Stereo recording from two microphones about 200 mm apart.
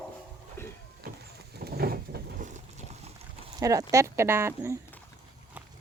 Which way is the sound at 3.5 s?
15° right (ahead or behind).